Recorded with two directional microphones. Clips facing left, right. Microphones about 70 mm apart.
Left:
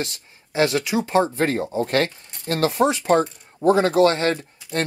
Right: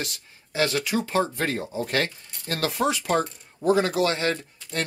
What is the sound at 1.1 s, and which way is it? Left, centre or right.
Speech, left.